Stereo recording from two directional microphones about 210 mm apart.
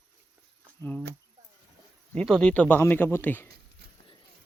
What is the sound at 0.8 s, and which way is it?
Speech, 5° left (ahead or behind).